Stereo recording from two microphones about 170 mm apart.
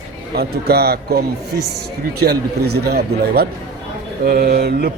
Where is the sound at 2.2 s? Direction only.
70° right (ahead or behind).